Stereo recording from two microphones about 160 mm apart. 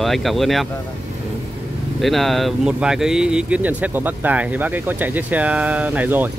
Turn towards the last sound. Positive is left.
turn(degrees=-10)  # may be behind; listen again after turning